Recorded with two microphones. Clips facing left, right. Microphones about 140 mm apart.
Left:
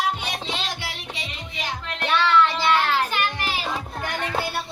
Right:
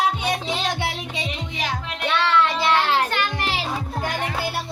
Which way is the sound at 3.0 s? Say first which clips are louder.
Right 1 dB; 70° right (ahead or behind).